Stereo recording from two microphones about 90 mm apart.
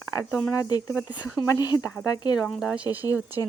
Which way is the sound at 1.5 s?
45° left (ahead or behind).